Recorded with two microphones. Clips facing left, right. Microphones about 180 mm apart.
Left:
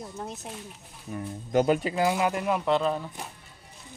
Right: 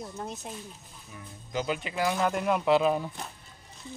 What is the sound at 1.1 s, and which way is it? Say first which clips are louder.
Speech: left 11 dB; 55° left (ahead or behind).